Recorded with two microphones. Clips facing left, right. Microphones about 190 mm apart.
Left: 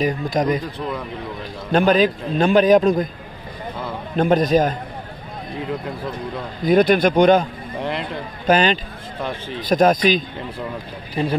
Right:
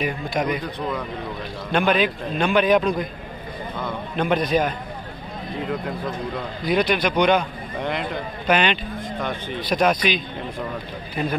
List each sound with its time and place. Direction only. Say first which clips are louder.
0.0 s a man's voice: left 4 dB; 40° left (ahead or behind)
1.7 s a man's voice: left 5 dB; 40° left (ahead or behind)
4.2 s speech: left 5 dB; 45° left (ahead or behind)
6.6 s speech: left 6 dB; 50° left (ahead or behind)
8.5 s a man's voice: left 4 dB; 40° left (ahead or behind)